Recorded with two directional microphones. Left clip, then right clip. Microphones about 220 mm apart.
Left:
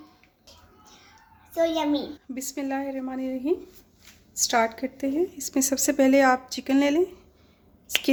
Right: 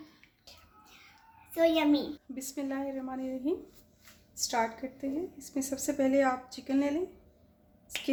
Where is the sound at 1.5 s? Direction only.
20° right (ahead or behind).